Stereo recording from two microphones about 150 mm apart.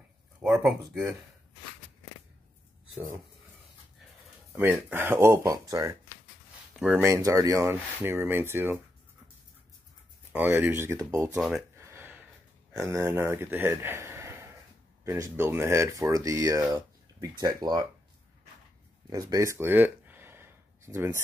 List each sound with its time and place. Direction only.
0.4 s speech: 5° right (ahead or behind)
4.6 s speech: 15° right (ahead or behind)
6.8 s speech: 5° right (ahead or behind)
7.1 s speech: 20° right (ahead or behind)
10.3 s speech: 10° right (ahead or behind)
11.8 s a sound: 15° right (ahead or behind)
12.7 s a man's voice: 20° right (ahead or behind)
19.0 s a sound: 25° right (ahead or behind)